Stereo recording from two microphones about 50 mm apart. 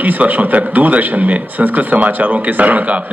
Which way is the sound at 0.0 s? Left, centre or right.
Right.